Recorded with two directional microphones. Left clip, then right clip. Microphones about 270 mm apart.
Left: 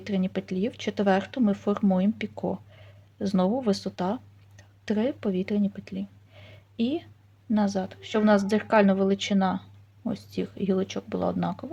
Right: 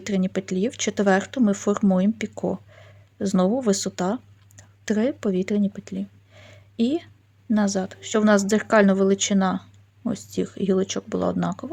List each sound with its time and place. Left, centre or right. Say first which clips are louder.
0.0 s speech: right 4 dB; centre